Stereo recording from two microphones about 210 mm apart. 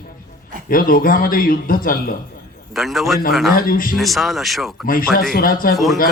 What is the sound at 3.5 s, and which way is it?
Speech, 40° left (ahead or behind).